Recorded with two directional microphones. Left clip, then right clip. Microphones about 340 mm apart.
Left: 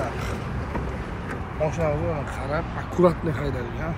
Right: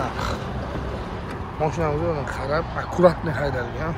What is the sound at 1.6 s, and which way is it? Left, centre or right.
Speech, centre.